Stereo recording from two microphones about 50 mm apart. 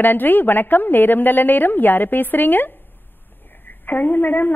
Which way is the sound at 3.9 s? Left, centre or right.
Left.